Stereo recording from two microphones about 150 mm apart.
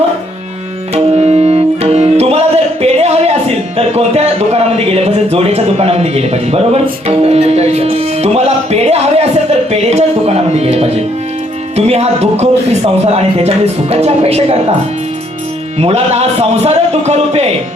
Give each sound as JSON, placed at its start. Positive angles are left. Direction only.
{"t": 0.9, "sound": "music", "side_deg": -45}
{"t": 2.8, "sound": "a sound", "side_deg": -45}
{"t": 3.8, "sound": "speech", "side_deg": -45}
{"t": 15.8, "sound": "speech", "side_deg": -40}